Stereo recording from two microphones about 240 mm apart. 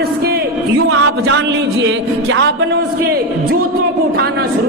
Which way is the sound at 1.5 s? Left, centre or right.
Right.